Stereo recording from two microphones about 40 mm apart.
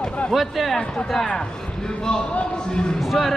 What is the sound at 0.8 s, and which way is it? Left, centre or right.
Speech, left.